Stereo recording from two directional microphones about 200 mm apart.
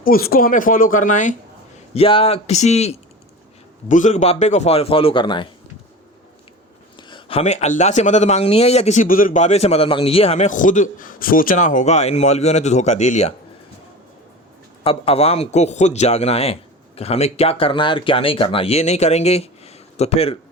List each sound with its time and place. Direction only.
0.0 s speech: 45° left (ahead or behind)
1.9 s speech: 30° left (ahead or behind)
7.1 s speech: 30° left (ahead or behind)
14.8 s speech: 30° left (ahead or behind)